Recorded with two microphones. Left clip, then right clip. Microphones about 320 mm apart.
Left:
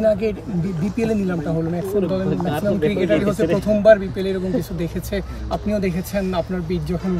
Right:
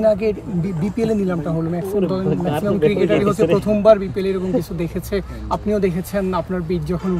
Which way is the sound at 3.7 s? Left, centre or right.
Centre.